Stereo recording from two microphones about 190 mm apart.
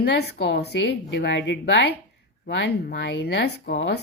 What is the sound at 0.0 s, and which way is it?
A woman's voice, 70° left (ahead or behind).